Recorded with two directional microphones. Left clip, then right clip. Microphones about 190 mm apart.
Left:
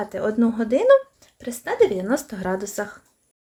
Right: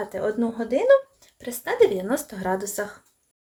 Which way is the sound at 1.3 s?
15° left (ahead or behind).